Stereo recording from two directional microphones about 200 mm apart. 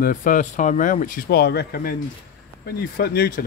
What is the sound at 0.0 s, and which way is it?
Speech, 40° left (ahead or behind).